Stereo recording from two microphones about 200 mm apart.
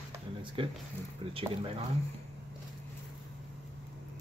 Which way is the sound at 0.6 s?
25° right (ahead or behind).